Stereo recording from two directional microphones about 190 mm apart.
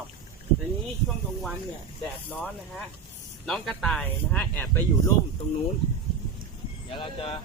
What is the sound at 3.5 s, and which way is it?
A man's voice, centre (ahead or behind).